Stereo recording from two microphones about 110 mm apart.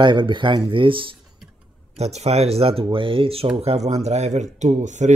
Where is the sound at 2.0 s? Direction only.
80° right; by 3.7 s 55° right (ahead or behind).